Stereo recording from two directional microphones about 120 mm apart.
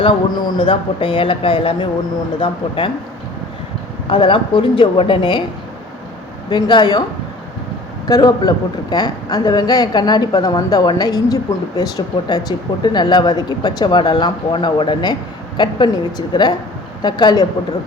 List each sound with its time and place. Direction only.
0.0 s a man's voice: 40° left (ahead or behind)
4.1 s a man's voice: 45° left (ahead or behind)
6.5 s speech: 40° left (ahead or behind)
8.0 s speech: 30° left (ahead or behind)